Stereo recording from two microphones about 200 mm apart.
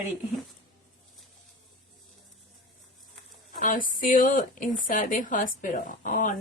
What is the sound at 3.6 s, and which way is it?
A woman's voice, 40° left (ahead or behind).